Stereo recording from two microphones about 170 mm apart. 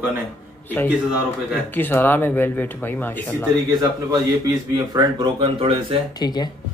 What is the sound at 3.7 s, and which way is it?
A man's voice, 25° right (ahead or behind).